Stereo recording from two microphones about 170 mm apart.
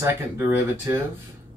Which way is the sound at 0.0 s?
15° right (ahead or behind).